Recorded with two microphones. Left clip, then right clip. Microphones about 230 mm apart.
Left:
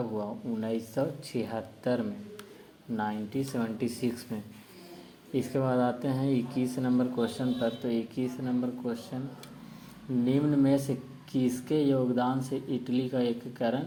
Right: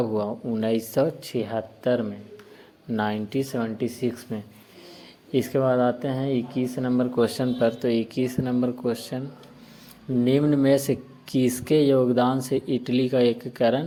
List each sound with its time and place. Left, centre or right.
0.0 s speech: right
2.9 s speech: right
10.2 s speech: right